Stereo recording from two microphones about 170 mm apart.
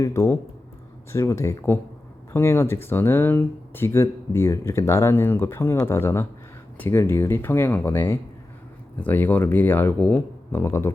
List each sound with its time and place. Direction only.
0.0 s speech: 15° left (ahead or behind)